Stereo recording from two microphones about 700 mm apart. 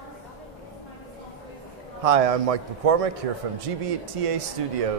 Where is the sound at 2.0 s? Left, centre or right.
Right.